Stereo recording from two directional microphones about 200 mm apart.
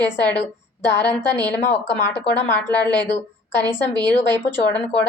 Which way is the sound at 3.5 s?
10° left (ahead or behind).